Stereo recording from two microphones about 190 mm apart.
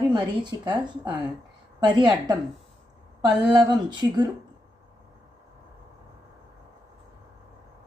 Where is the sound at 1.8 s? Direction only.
20° right (ahead or behind).